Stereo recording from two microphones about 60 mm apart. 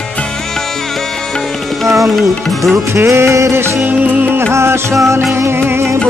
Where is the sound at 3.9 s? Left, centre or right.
Right.